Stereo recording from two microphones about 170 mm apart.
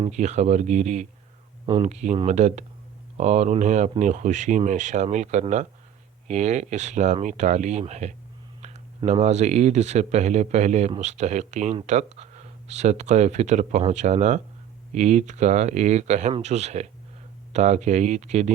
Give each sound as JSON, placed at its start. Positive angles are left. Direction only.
{"t": 0.1, "sound": "speech", "side_deg": -40}